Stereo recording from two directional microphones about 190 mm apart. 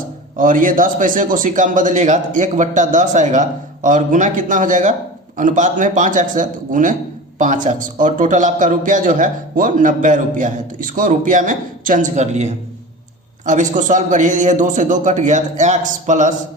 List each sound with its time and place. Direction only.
0.3 s a man's voice: 45° right (ahead or behind)